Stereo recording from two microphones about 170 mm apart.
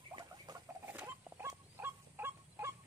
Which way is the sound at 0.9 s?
10° right (ahead or behind).